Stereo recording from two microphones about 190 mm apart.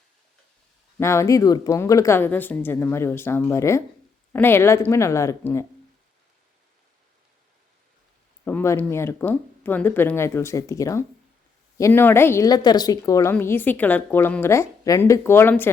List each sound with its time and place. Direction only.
0.9 s a woman's voice: 15° left (ahead or behind)
8.4 s a woman's voice: 10° left (ahead or behind)